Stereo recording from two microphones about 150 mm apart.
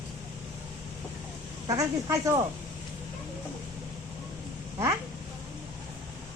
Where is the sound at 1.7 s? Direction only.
20° right (ahead or behind).